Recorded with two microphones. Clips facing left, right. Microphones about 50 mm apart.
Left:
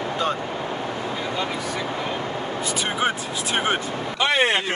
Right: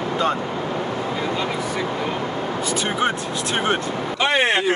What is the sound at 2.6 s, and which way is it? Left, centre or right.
Speech, centre.